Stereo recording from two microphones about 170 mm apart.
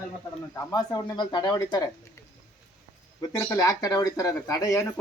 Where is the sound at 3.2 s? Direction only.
20° left (ahead or behind).